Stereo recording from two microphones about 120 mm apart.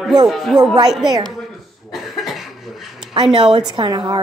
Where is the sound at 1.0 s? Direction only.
35° right (ahead or behind).